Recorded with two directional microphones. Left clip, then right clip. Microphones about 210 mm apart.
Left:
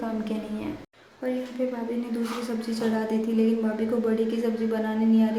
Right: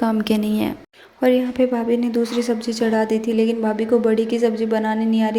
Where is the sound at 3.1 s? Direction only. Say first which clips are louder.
Right 6 dB; 30° right (ahead or behind).